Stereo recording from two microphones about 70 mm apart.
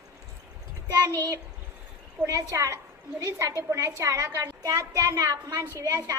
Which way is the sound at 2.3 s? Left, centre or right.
Right.